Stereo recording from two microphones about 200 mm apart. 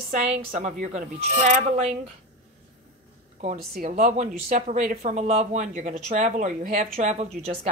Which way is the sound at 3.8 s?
35° right (ahead or behind).